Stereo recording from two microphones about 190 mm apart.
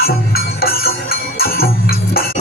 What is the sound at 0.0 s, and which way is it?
Music, 55° left (ahead or behind).